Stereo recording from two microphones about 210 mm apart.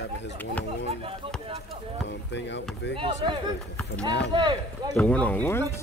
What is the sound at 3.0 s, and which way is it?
Speech, 25° right (ahead or behind).